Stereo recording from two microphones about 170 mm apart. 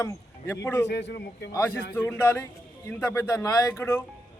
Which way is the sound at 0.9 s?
90° left.